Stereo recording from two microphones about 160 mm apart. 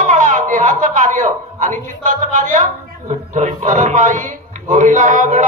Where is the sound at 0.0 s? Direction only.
50° right (ahead or behind).